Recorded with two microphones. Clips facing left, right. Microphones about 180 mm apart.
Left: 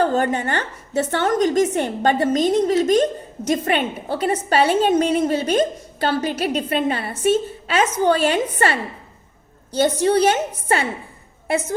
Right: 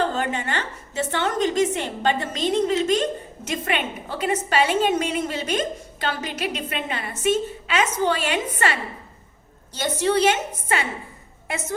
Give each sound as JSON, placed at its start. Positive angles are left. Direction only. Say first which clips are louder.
{"t": 0.0, "sound": "a woman's voice", "louder": "left 5 dB", "side_deg": 45}
{"t": 9.8, "sound": "a woman's voice", "louder": "left 4 dB", "side_deg": 45}